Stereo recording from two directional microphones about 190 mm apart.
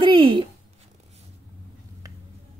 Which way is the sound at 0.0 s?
25° right (ahead or behind).